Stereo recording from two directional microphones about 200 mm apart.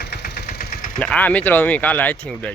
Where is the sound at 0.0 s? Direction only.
55° left (ahead or behind).